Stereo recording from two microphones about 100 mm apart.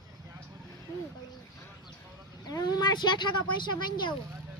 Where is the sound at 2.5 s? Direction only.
40° left (ahead or behind).